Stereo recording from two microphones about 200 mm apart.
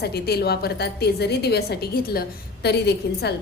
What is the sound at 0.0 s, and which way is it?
A woman's voice, 55° left (ahead or behind).